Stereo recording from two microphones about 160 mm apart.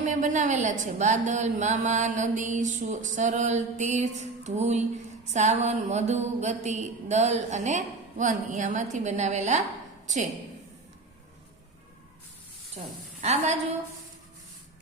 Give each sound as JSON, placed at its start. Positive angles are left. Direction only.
{"t": 0.0, "sound": "a woman's voice", "side_deg": -50}
{"t": 13.2, "sound": "a woman's voice", "side_deg": -45}